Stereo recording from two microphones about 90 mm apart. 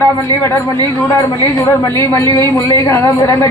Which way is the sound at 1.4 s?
35° left (ahead or behind).